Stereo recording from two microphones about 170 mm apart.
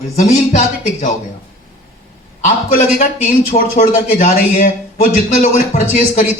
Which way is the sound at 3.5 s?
45° left (ahead or behind).